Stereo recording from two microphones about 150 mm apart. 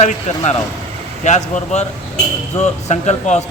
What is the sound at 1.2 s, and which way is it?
Speech, 50° left (ahead or behind).